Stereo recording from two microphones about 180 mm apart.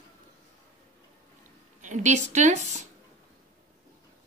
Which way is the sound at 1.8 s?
40° right (ahead or behind).